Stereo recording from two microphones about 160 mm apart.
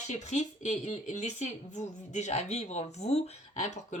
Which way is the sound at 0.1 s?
45° left (ahead or behind).